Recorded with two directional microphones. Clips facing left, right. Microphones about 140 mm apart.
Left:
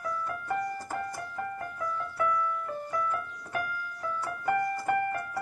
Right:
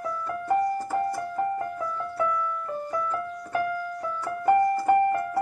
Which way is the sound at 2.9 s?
30° right (ahead or behind).